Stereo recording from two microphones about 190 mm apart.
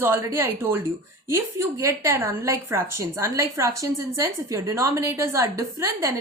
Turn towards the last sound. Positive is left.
turn(degrees=-15)  # may be behind; listen again after turning